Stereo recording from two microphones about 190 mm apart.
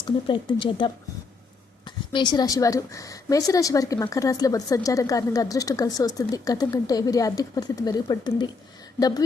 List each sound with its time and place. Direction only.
0.0 s a woman's voice: 25° left (ahead or behind)